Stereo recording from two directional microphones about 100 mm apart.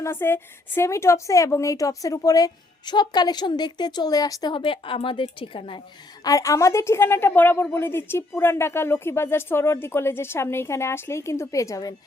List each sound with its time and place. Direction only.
0.0 s a woman's voice: 25° left (ahead or behind); by 4.5 s 40° left (ahead or behind)
4.5 s a woman's voice: 60° left (ahead or behind)
6.2 s speech: 35° left (ahead or behind)